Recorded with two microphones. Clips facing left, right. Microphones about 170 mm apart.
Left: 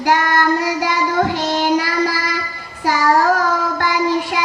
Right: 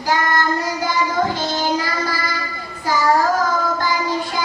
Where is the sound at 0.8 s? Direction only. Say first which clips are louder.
Left 2 dB; 70° left (ahead or behind).